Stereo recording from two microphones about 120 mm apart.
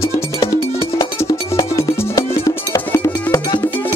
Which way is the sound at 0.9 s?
30° left (ahead or behind).